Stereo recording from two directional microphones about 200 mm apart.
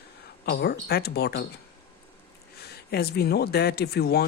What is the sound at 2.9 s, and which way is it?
Speech, 50° left (ahead or behind).